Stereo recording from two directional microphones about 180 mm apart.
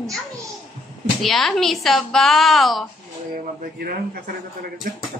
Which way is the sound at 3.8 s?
55° right (ahead or behind).